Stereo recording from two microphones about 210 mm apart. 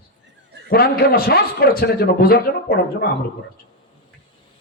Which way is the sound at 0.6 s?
45° left (ahead or behind).